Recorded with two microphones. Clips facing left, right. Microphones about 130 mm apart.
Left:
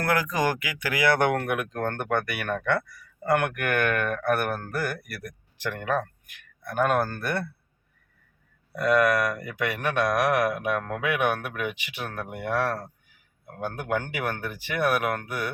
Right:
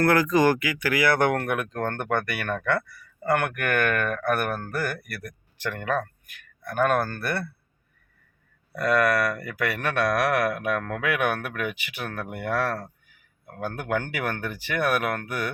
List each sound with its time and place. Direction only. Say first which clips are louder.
0.0 s speech: right 5 dB; 10° left (ahead or behind)
8.7 s speech: left 1 dB; 15° left (ahead or behind)
13.9 s speech: right 1 dB; 10° left (ahead or behind)